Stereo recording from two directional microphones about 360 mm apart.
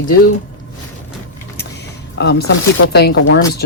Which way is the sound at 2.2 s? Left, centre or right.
Left.